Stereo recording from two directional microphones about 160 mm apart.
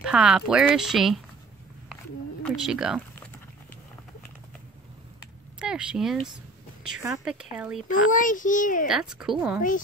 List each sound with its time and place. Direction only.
0.0 s speech: 5° right (ahead or behind)
2.5 s speech: 5° right (ahead or behind)
5.6 s speech: 5° right (ahead or behind)
7.2 s speech: 5° right (ahead or behind)
7.9 s a child's voice: 55° left (ahead or behind)
8.8 s speech: 5° right (ahead or behind)